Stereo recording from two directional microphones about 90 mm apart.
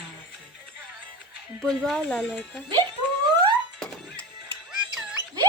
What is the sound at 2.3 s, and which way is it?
Speech, centre (ahead or behind).